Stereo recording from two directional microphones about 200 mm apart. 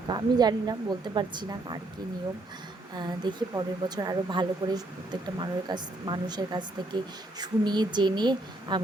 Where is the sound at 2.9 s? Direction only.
20° right (ahead or behind).